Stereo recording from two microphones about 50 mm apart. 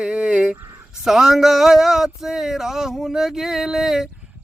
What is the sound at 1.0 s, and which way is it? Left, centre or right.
Speech, centre.